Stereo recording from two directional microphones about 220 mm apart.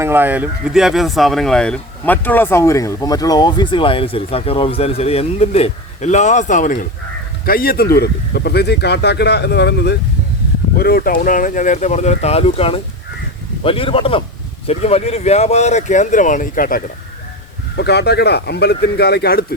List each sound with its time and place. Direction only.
0.0 s speech: 10° right (ahead or behind); by 19.5 s 45° left (ahead or behind)